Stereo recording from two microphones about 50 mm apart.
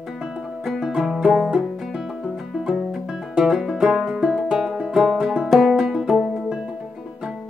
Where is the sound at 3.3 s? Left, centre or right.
Centre.